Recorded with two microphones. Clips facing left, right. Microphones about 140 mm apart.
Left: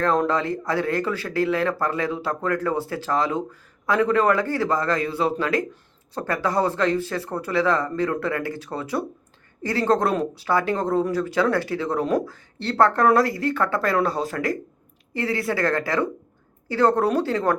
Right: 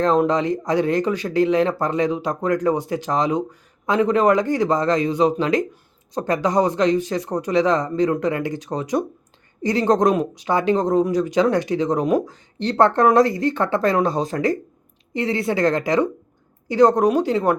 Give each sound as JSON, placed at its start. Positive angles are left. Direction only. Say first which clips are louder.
{"t": 0.0, "sound": "speech", "louder": "right 4 dB", "side_deg": -20}